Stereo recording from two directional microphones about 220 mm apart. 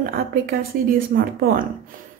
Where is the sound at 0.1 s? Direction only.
40° right (ahead or behind).